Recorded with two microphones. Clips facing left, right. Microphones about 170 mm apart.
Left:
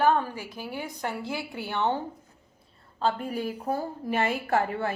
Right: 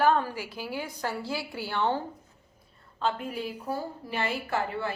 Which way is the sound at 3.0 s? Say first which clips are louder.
Left 3 dB; 40° left (ahead or behind).